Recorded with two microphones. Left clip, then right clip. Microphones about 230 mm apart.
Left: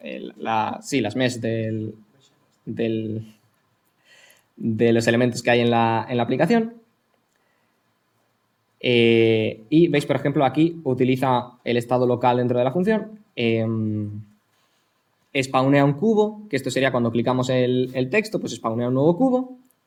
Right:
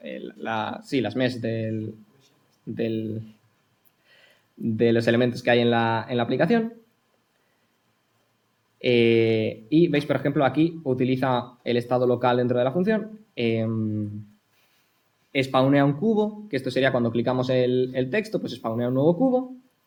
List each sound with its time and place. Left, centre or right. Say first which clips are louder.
0.0 s speech: left 3 dB; left
8.8 s speech: left 2 dB; left
15.3 s speech: left 1 dB; left